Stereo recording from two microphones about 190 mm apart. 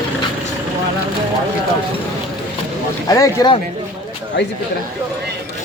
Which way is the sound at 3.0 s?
20° left (ahead or behind).